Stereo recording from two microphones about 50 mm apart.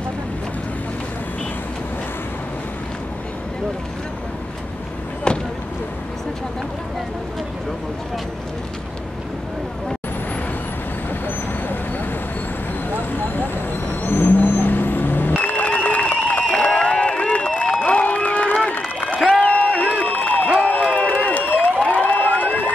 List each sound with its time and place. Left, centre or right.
11.2 s vehicle: left
14.0 s vehicle: left
15.3 s music: left
16.5 s a sound: left
19.4 s applause: left
20.6 s crowd: left
21.7 s a sound: left